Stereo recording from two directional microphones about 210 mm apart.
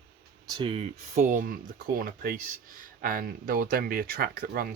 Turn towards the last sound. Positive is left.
turn(degrees=-45)  # may be behind; listen again after turning